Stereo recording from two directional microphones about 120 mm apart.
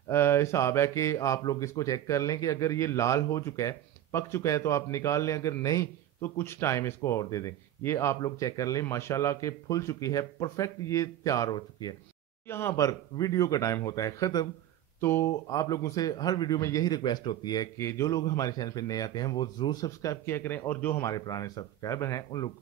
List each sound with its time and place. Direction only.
0.1 s speech: 20° left (ahead or behind)
12.4 s speech: 20° left (ahead or behind); by 17.6 s 35° left (ahead or behind)
17.7 s speech: 25° left (ahead or behind)
21.1 s speech: 30° left (ahead or behind)